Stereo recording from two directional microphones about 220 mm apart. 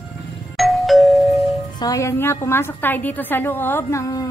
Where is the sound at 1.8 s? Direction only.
15° left (ahead or behind).